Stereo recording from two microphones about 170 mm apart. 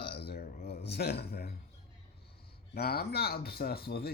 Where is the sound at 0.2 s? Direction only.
65° left (ahead or behind).